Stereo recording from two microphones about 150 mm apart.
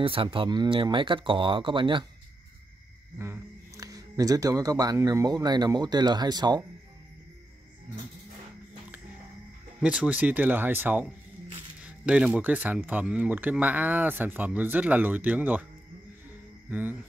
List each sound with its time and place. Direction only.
0.0 s speech: 35° right (ahead or behind)
3.2 s speech: 20° right (ahead or behind)
9.8 s speech: 5° right (ahead or behind)